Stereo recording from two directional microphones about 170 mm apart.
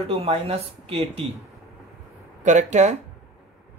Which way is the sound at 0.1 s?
35° right (ahead or behind).